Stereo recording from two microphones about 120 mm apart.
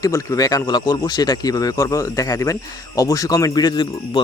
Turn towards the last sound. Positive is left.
turn(degrees=35)  # may be behind; listen again after turning